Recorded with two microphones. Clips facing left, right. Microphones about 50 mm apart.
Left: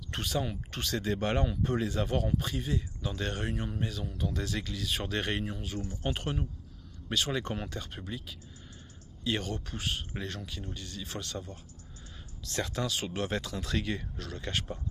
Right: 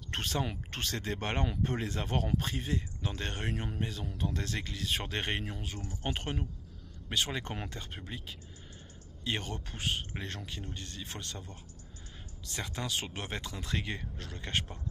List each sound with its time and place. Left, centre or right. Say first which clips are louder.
0.1 s speech: left 1 dB; right
12.5 s speech: left 4 dB; right